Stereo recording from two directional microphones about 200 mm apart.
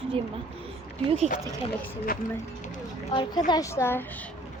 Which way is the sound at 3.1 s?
20° left (ahead or behind).